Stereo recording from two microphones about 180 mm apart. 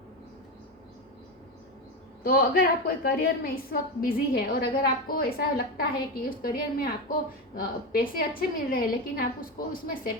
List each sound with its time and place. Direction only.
2.2 s a woman's voice: 55° left (ahead or behind)